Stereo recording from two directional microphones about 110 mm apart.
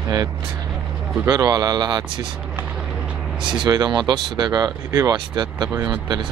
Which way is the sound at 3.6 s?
40° right (ahead or behind).